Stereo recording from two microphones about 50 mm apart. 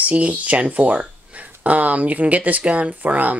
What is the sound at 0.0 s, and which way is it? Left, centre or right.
Speech, right.